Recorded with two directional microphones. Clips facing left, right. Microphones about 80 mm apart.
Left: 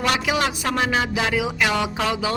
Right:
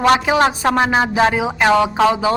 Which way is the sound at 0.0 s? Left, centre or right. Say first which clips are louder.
Right 8 dB; right.